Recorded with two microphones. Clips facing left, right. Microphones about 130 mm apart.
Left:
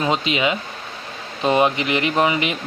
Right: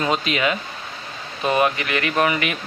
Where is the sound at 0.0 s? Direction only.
20° left (ahead or behind).